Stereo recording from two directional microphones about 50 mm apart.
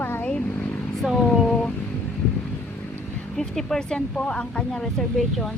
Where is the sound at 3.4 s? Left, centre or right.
Centre.